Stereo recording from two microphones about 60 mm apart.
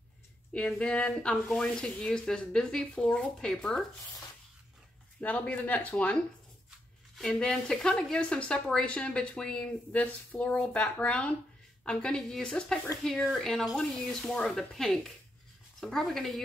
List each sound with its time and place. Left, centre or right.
0.7 s speech: centre
5.2 s speech: left
7.2 s a woman's voice: centre